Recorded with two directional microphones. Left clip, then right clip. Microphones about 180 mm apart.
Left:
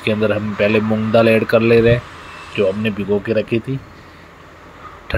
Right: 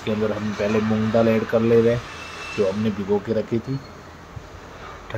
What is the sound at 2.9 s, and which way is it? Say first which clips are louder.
Speech: left 4 dB; 10° left (ahead or behind).